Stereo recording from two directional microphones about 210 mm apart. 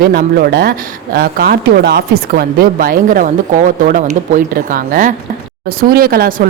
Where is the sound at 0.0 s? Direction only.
45° right (ahead or behind).